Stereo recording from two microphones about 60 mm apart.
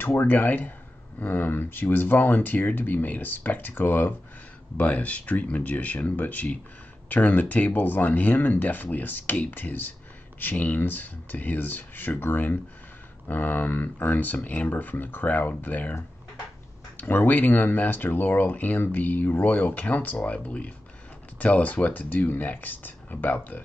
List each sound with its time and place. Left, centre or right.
0.0 s speech: left